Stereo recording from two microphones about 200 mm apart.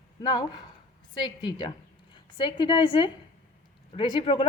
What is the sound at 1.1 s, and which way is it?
A woman's voice, 20° left (ahead or behind).